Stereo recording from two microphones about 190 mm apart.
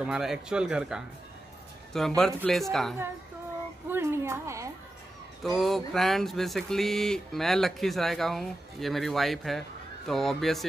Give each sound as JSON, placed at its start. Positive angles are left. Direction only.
{"t": 0.0, "sound": "speech", "side_deg": -5}
{"t": 3.9, "sound": "a sound", "side_deg": -15}
{"t": 5.4, "sound": "speech", "side_deg": 0}